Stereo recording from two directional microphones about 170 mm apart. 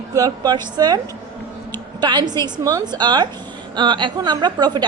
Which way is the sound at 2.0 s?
25° right (ahead or behind).